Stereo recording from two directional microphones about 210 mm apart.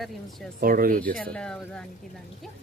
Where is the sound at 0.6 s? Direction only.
45° right (ahead or behind).